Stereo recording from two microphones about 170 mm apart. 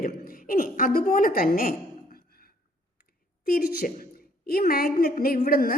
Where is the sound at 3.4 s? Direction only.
60° left (ahead or behind).